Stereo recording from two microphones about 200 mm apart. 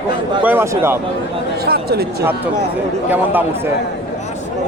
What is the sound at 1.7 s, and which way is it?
Speech, 50° right (ahead or behind).